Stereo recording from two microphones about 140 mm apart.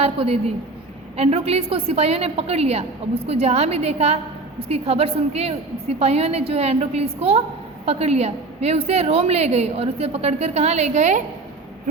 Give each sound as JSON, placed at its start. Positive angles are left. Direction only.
{"t": 0.0, "sound": "a woman's voice", "side_deg": -45}